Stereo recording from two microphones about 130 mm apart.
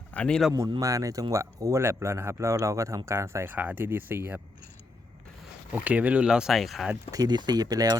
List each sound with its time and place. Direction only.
0.1 s speech: 10° left (ahead or behind)
0.8 s a man's voice: 25° right (ahead or behind)
5.7 s speech: 10° right (ahead or behind)
7.1 s speech: 30° right (ahead or behind)